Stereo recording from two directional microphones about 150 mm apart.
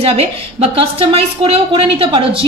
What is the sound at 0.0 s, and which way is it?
A woman's voice, 45° right (ahead or behind).